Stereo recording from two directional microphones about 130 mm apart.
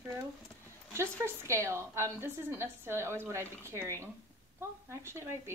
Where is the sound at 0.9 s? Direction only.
20° right (ahead or behind).